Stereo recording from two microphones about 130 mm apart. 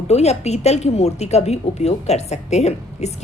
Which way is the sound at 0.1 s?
55° left (ahead or behind).